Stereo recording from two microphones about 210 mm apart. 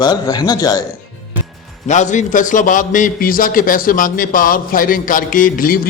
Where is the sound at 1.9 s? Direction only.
35° left (ahead or behind).